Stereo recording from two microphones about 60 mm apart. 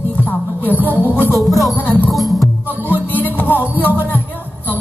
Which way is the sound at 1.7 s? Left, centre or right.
Left.